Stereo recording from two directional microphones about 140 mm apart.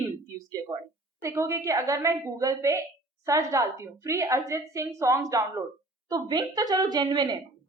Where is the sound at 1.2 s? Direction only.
20° right (ahead or behind).